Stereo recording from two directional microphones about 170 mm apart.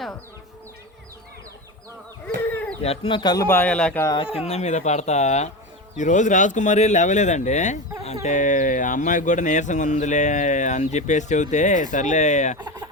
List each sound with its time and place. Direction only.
2.2 s a sound: 10° left (ahead or behind)
2.8 s speech: 35° left (ahead or behind)
3.4 s speech: 10° left (ahead or behind)
4.0 s speech: 25° left (ahead or behind); by 12.5 s 45° left (ahead or behind)
12.5 s speech: 25° right (ahead or behind)